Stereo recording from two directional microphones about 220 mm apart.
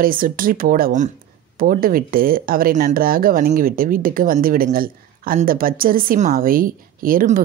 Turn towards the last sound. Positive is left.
turn(degrees=-40)  # may be behind; listen again after turning